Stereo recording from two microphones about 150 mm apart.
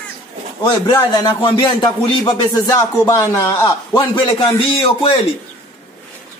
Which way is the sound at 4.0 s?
35° left (ahead or behind).